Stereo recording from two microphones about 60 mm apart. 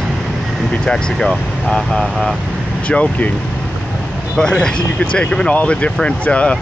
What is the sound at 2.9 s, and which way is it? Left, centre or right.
Speech, left.